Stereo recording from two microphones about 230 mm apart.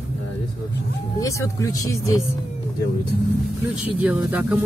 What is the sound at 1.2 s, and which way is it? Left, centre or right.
Speech, centre.